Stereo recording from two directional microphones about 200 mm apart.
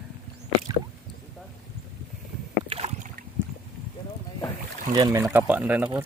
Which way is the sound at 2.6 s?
30° right (ahead or behind).